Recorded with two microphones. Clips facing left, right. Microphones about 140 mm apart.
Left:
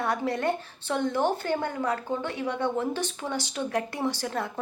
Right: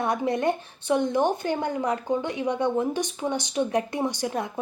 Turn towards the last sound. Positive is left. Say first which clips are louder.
# right 2 dB
turn(degrees=-15)  # may be behind; listen again after turning